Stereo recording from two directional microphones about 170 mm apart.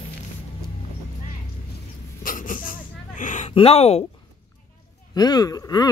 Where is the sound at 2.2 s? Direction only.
50° left (ahead or behind).